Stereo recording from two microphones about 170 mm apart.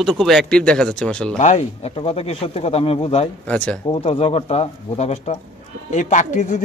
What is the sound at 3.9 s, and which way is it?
A man's voice, 35° left (ahead or behind).